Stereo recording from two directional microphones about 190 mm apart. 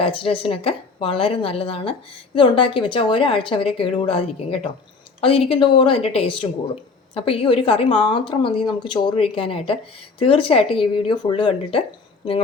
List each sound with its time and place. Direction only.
0.0 s a woman's voice: 30° left (ahead or behind)